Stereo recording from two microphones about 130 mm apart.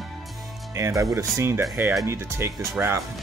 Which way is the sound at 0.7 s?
25° right (ahead or behind).